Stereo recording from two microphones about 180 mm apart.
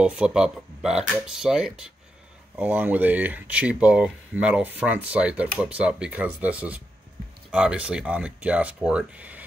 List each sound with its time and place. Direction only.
0.0 s speech: 5° right (ahead or behind)